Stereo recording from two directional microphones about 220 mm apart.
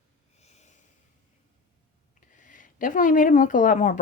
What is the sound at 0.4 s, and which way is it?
Snort, 30° left (ahead or behind).